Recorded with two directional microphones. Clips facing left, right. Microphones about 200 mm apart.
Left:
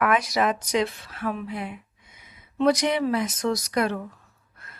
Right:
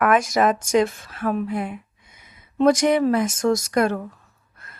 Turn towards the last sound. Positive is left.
turn(degrees=-45)  # may be behind; listen again after turning